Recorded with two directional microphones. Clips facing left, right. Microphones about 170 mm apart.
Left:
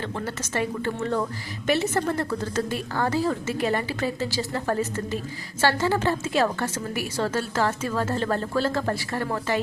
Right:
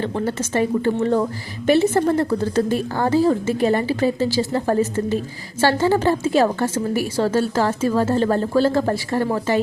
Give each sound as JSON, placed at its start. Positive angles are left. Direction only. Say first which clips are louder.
{"t": 0.0, "sound": "a woman's voice", "louder": "right 8 dB", "side_deg": -30}